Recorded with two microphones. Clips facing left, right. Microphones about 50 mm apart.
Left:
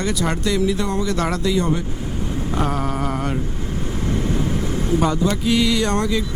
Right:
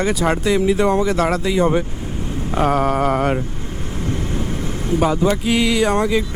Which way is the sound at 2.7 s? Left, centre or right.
Right.